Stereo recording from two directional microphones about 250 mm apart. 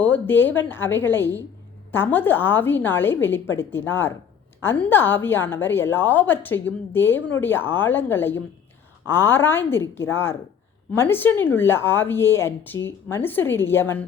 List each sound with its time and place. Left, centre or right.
0.0 s a woman's voice: centre